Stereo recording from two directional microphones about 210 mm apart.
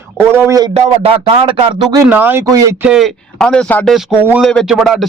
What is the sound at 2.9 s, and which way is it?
A man's voice, centre (ahead or behind).